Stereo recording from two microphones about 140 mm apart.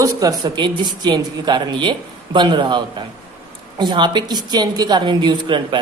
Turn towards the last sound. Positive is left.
turn(degrees=-35)  # may be behind; listen again after turning